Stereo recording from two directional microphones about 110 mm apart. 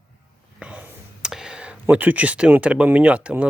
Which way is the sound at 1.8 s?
15° right (ahead or behind).